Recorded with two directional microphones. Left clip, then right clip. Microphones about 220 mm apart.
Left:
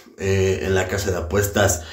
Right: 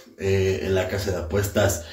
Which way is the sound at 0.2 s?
15° left (ahead or behind).